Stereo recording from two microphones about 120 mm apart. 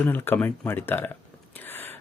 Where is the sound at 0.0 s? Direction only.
20° left (ahead or behind).